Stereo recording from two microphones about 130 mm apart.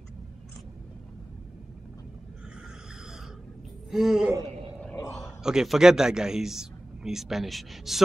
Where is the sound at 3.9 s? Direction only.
5° right (ahead or behind).